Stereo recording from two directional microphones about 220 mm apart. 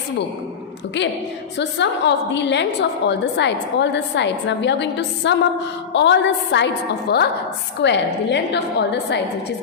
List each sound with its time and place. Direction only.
1.5 s a woman's voice: 55° left (ahead or behind)